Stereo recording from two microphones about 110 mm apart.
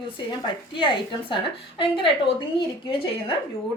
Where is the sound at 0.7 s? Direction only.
50° left (ahead or behind).